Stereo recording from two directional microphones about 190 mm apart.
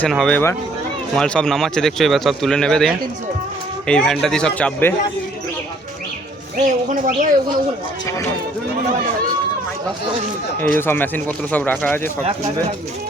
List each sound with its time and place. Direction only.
0.0 s speech: 5° left (ahead or behind)
6.6 s speech: 40° right (ahead or behind)
10.6 s speech: 10° left (ahead or behind)